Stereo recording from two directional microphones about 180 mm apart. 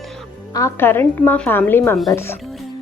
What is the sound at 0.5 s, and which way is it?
A woman's voice, 15° left (ahead or behind).